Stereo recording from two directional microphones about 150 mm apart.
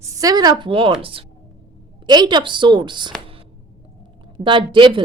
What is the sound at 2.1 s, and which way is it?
A woman's voice, 30° right (ahead or behind).